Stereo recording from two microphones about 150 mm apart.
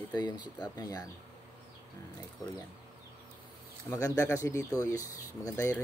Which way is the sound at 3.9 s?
20° left (ahead or behind).